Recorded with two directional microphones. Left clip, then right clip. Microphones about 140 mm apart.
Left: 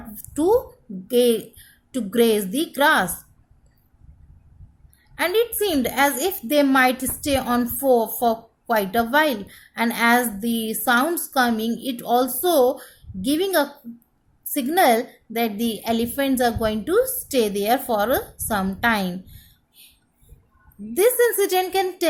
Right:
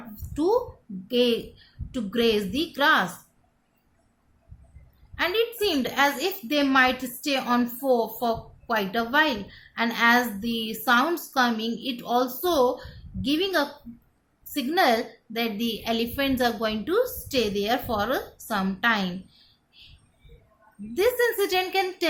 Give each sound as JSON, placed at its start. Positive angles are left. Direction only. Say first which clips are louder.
{"t": 0.3, "sound": "a woman's voice", "louder": "left 4 dB", "side_deg": 55}
{"t": 5.1, "sound": "a woman's voice", "louder": "left 4 dB", "side_deg": 55}
{"t": 20.9, "sound": "a woman's voice", "louder": "left 5 dB", "side_deg": 50}